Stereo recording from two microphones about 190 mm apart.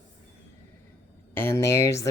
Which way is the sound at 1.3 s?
10° left (ahead or behind).